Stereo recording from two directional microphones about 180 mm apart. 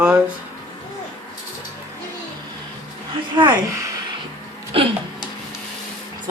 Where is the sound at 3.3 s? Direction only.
25° right (ahead or behind).